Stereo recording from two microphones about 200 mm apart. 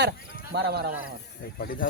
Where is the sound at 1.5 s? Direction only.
45° left (ahead or behind).